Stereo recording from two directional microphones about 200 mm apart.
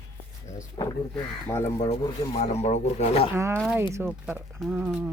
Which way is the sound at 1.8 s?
25° left (ahead or behind).